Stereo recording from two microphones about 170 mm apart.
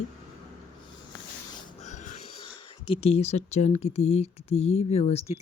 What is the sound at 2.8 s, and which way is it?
Speech, 35° left (ahead or behind).